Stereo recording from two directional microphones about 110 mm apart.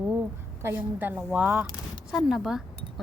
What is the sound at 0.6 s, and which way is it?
A woman's voice, 20° right (ahead or behind).